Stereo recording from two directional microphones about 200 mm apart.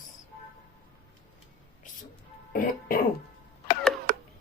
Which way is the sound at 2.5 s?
45° left (ahead or behind).